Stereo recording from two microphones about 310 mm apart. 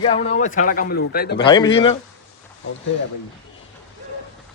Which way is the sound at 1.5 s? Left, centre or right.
Centre.